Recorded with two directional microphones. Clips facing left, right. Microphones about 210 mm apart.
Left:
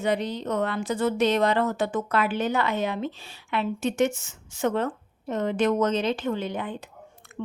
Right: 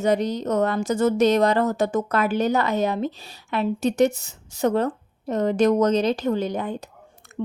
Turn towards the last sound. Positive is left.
turn(degrees=-40)  # may be behind; listen again after turning